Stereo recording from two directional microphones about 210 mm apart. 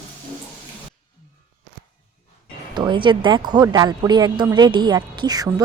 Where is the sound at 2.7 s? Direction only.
20° right (ahead or behind).